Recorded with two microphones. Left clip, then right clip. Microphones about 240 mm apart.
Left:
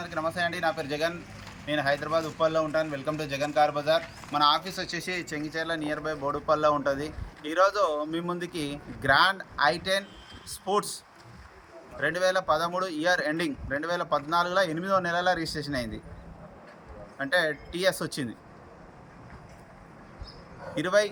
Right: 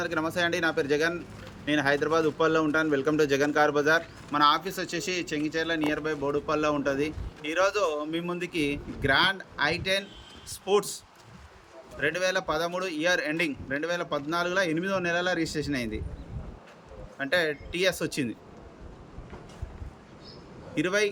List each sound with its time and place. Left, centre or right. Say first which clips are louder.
0.0 s a man's voice: right 2 dB; right
4.3 s speech: right 1 dB; centre
11.9 s speech: left 1 dB; centre
17.2 s speech: even; centre
20.7 s speech: left 2 dB; centre